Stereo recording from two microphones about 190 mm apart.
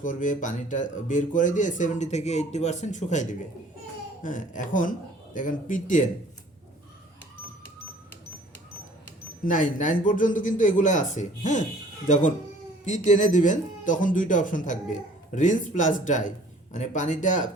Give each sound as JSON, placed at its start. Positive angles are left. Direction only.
{"t": 0.0, "sound": "a man's voice", "side_deg": 45}
{"t": 9.4, "sound": "a man's voice", "side_deg": 45}